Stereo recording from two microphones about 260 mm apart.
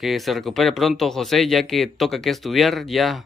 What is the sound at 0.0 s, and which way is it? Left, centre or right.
Speech, centre.